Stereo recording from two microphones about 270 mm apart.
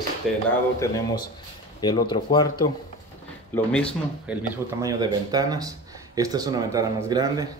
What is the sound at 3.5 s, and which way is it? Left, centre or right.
Speech, centre.